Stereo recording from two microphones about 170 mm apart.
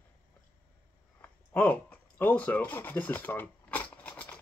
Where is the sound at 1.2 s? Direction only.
10° left (ahead or behind).